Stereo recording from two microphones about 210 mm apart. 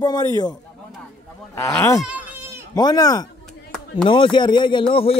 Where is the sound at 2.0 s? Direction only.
5° right (ahead or behind).